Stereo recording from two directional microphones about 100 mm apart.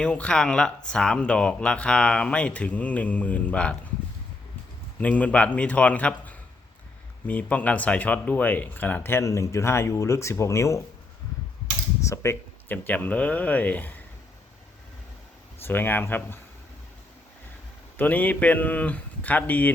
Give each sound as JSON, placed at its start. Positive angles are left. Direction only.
{"t": 0.0, "sound": "speech", "side_deg": 10}
{"t": 4.9, "sound": "speech", "side_deg": 15}
{"t": 12.0, "sound": "speech", "side_deg": 30}
{"t": 15.6, "sound": "speech", "side_deg": 20}
{"t": 17.9, "sound": "speech", "side_deg": 15}